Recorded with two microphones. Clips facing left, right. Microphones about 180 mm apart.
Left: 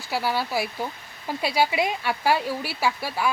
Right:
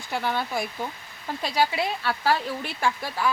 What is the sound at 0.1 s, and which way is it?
Speech, 5° left (ahead or behind).